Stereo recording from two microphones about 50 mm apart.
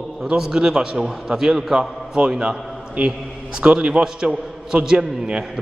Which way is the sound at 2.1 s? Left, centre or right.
Centre.